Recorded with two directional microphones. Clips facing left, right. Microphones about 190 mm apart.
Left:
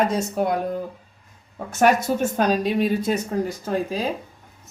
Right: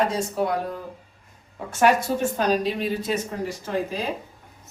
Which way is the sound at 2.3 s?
45° left (ahead or behind).